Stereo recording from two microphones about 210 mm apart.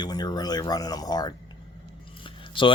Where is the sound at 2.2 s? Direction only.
25° left (ahead or behind).